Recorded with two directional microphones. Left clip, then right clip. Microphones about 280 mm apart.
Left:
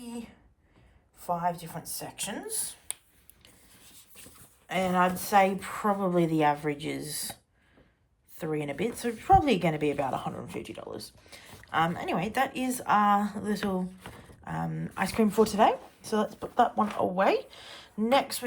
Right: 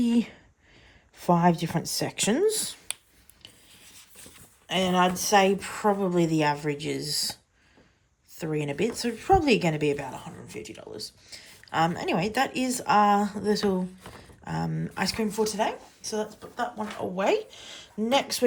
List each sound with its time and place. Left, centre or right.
1.2 s speech: right
4.2 s speech: centre
8.4 s speech: centre